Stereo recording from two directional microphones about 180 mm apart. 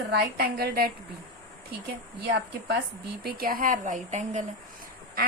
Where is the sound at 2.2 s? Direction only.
60° right (ahead or behind); by 4.4 s 40° right (ahead or behind).